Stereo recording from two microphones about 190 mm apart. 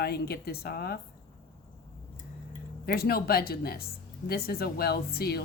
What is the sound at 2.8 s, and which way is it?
Speech, 55° left (ahead or behind).